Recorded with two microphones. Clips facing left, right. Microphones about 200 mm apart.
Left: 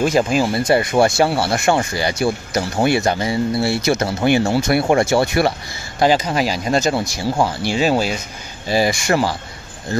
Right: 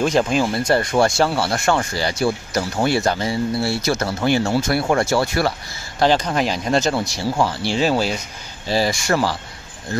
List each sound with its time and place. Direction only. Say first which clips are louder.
0.0 s speech: left 1 dB; 5° left (ahead or behind); by 5.5 s 20° left (ahead or behind)
5.9 s speech: left 1 dB; 5° left (ahead or behind)